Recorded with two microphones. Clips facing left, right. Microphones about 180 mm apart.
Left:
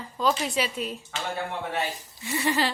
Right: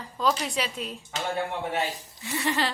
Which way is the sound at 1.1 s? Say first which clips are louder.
Right 2 dB; 15° right (ahead or behind).